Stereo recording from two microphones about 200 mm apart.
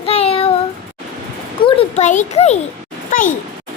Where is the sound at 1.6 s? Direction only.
25° left (ahead or behind).